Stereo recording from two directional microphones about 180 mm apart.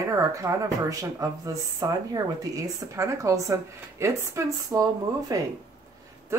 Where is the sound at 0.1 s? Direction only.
15° right (ahead or behind).